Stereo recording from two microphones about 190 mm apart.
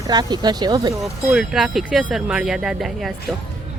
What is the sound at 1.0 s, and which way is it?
Speech, centre (ahead or behind).